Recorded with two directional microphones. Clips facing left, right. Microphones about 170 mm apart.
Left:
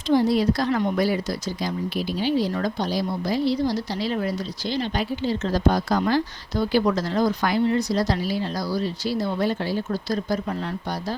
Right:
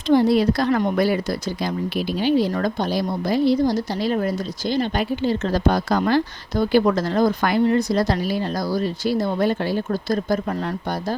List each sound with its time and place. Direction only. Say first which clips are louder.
0.1 s speech: right 3 dB; 60° right (ahead or behind)